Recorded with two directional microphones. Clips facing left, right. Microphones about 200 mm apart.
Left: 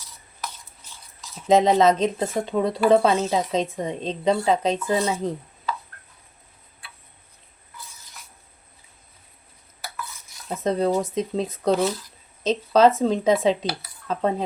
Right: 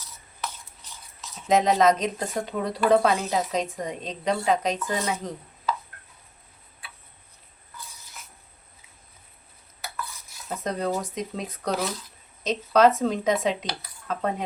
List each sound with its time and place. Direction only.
1.5 s a woman's voice: 25° left (ahead or behind)
10.6 s a woman's voice: 25° left (ahead or behind)